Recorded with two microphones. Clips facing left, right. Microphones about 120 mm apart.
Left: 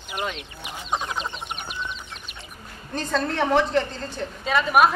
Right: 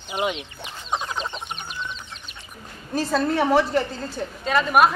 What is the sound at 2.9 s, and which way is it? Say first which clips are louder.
Speech: right 3 dB; 5° right (ahead or behind).